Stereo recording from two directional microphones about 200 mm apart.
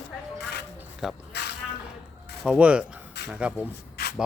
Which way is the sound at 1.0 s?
Centre (ahead or behind).